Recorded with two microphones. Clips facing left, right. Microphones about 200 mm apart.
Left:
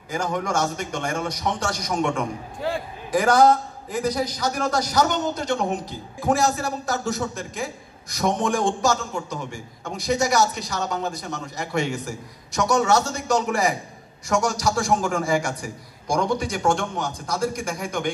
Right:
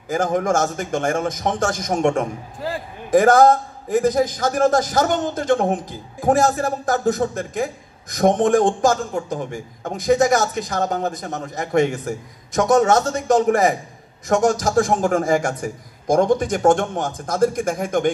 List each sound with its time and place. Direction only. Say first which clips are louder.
0.1 s a man's voice: right 6 dB; 45° right (ahead or behind)